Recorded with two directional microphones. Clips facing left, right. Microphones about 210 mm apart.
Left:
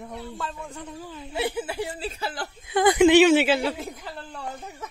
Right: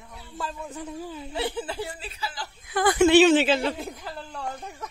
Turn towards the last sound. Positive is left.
turn(degrees=0)  # may be behind; listen again after turning